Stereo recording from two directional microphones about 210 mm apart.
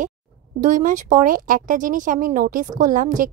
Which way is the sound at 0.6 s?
40° right (ahead or behind).